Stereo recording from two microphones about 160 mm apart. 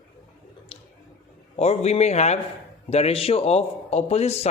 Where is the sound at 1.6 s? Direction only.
40° left (ahead or behind).